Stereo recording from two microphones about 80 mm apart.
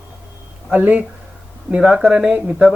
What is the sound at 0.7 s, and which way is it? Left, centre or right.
Speech, centre.